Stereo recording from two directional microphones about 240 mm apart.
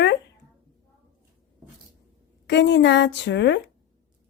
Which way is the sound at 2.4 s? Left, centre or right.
Left.